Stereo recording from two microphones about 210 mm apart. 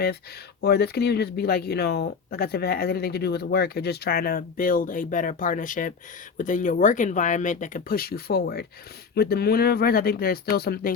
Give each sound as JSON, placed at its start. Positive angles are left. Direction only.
{"t": 0.6, "sound": "speech", "side_deg": 50}